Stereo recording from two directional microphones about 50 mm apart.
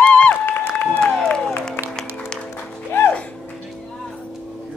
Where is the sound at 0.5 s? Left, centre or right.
Left.